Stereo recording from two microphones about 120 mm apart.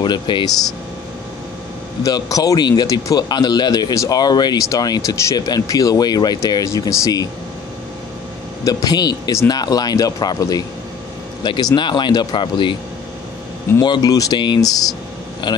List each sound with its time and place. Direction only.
0.0 s speech: 40° left (ahead or behind)
2.0 s speech: 30° left (ahead or behind)
8.6 s speech: 30° left (ahead or behind)
11.4 s speech: 40° left (ahead or behind)
13.7 s a man's voice: 35° left (ahead or behind)